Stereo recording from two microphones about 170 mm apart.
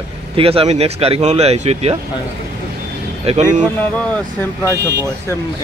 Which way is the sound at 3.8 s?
10° left (ahead or behind).